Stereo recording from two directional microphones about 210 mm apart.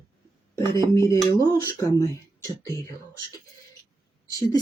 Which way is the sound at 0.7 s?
15° left (ahead or behind).